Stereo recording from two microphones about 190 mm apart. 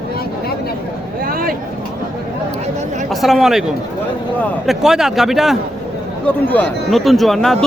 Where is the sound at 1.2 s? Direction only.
50° right (ahead or behind).